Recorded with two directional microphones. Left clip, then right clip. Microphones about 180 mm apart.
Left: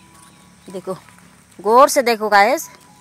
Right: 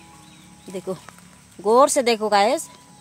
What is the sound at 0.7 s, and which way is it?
A woman's voice, 15° left (ahead or behind).